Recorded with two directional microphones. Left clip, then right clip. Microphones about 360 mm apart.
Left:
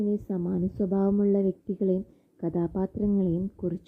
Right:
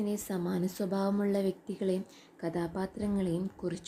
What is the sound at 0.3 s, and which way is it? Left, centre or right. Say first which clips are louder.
Speech: left 3 dB; centre.